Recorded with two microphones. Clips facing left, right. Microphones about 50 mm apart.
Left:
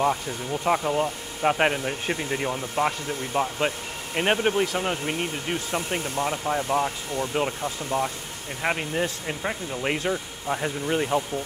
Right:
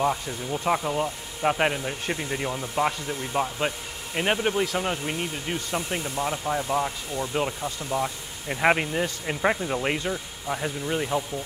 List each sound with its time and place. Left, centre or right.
0.0 s speech: centre
7.9 s speech: left
8.5 s speech: right
8.9 s speech: centre
9.4 s speech: right
9.8 s speech: centre